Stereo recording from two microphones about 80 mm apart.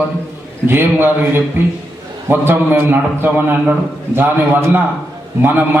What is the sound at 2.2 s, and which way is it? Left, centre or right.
A man's voice, right.